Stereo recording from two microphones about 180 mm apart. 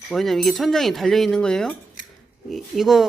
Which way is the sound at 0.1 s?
Centre (ahead or behind).